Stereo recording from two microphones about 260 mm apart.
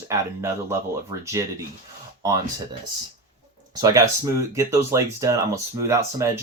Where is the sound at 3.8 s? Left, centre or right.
Centre.